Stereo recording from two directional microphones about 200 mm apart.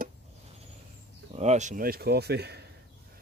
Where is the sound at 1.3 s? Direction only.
35° right (ahead or behind); by 2.6 s 55° right (ahead or behind).